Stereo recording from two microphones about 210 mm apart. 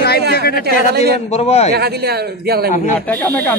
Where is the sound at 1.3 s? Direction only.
30° left (ahead or behind).